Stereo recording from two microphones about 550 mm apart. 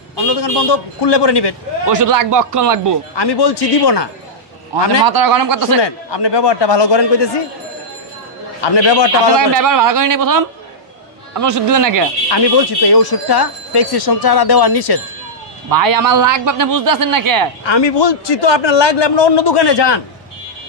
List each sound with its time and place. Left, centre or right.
0.3 s a man's voice: left
1.9 s a man's voice: right
3.2 s a man's voice: left
5.0 s a man's voice: right
5.8 s a man's voice: left
8.5 s a man's voice: left
9.5 s a man's voice: right
11.4 s a man's voice: right
12.3 s speech: left
15.7 s a man's voice: right
17.6 s a man's voice: left